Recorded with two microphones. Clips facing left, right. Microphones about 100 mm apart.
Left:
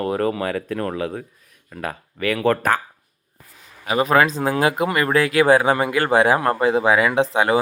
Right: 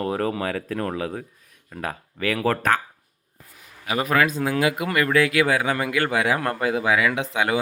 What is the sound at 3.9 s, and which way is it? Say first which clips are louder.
Speech: left 4 dB; 30° left (ahead or behind).